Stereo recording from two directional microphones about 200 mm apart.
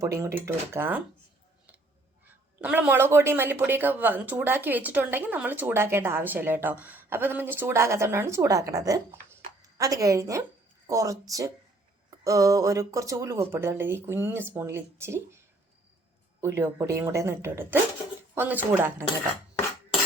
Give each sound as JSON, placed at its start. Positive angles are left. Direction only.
{"t": 0.0, "sound": "a woman's voice", "side_deg": -15}
{"t": 2.2, "sound": "a woman's voice", "side_deg": -10}
{"t": 16.4, "sound": "a woman's voice", "side_deg": -10}